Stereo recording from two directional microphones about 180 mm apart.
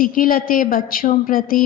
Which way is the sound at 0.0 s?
50° left (ahead or behind).